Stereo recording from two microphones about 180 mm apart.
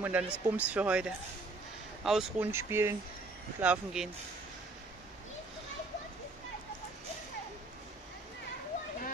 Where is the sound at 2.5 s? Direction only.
15° right (ahead or behind).